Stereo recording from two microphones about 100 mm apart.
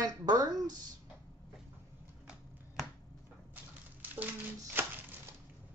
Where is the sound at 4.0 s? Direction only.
15° right (ahead or behind).